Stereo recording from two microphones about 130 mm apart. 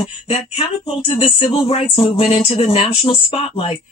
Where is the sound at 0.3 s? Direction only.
50° left (ahead or behind).